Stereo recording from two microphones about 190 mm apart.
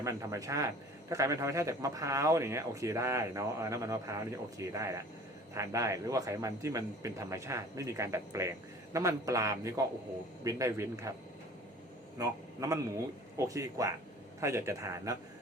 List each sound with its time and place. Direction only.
0.0 s a man's voice: 15° right (ahead or behind)
12.2 s a man's voice: 15° right (ahead or behind)